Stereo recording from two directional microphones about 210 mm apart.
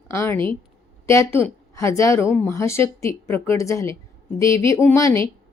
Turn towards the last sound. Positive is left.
turn(degrees=15)  # may be behind; listen again after turning